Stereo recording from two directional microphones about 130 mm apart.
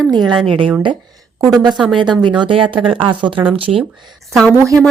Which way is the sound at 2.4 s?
40° right (ahead or behind).